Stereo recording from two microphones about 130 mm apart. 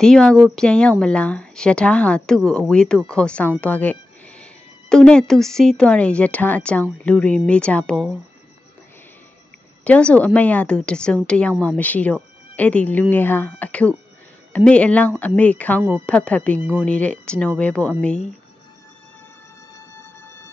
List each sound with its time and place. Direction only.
0.0 s speech: 5° left (ahead or behind)
9.8 s speech: 10° left (ahead or behind)
20.0 s a sound: 15° left (ahead or behind)